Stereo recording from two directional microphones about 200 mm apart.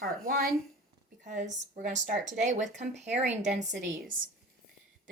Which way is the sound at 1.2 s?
40° right (ahead or behind).